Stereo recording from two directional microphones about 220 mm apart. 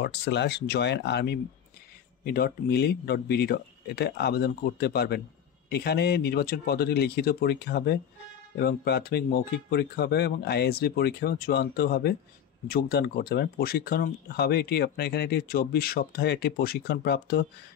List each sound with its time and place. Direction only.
0.0 s speech: 50° left (ahead or behind)